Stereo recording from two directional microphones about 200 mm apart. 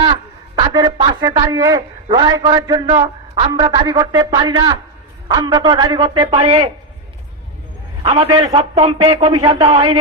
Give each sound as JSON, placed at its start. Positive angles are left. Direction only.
{"t": 0.0, "sound": "speech", "side_deg": -25}
{"t": 8.0, "sound": "speech", "side_deg": -30}